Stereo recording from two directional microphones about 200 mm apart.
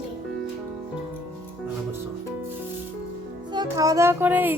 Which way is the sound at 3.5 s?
20° right (ahead or behind).